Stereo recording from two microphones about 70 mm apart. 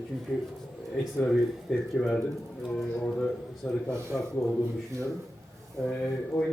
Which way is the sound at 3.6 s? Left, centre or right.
Centre.